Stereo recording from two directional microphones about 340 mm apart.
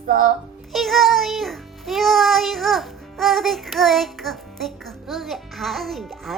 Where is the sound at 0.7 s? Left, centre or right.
Centre.